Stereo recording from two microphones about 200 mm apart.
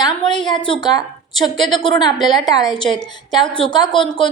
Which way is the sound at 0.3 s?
20° left (ahead or behind).